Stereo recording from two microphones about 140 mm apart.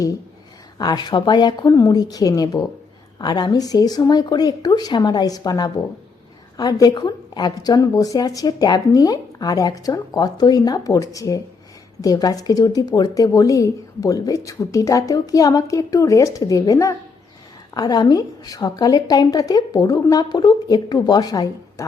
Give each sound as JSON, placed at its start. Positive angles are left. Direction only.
{"t": 0.8, "sound": "speech", "side_deg": 30}